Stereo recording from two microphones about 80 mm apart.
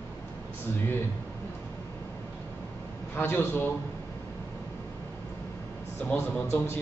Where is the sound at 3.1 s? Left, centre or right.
Left.